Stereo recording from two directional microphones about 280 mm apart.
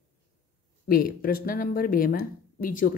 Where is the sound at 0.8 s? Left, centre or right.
Left.